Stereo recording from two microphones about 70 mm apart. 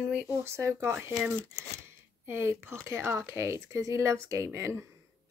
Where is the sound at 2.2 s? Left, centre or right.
Right.